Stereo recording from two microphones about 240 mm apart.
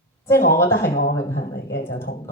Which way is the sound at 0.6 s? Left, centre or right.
Centre.